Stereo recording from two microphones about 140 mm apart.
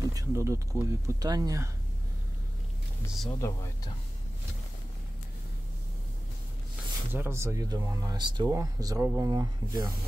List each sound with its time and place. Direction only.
0.0 s speech: 25° right (ahead or behind)
3.3 s speech: 25° left (ahead or behind)
7.1 s speech: 15° right (ahead or behind)